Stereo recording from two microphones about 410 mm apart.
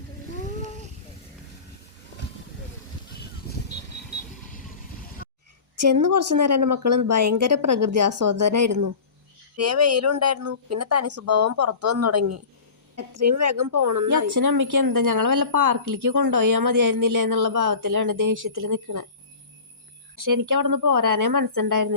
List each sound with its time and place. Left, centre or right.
5.2 s a sound: left
5.9 s a woman's voice: right
20.3 s speech: right